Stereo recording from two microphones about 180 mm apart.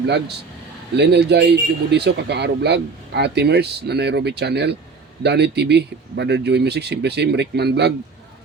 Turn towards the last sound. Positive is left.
turn(degrees=-65)  # may be behind; listen again after turning